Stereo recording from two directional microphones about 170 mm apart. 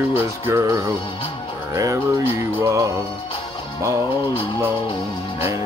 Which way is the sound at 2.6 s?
20° right (ahead or behind).